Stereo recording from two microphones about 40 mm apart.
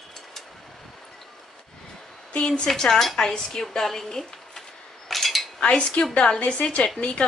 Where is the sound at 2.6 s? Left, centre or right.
Centre.